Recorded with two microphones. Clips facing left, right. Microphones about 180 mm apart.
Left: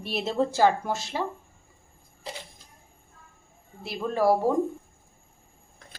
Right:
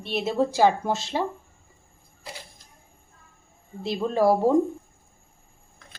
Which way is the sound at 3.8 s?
20° right (ahead or behind).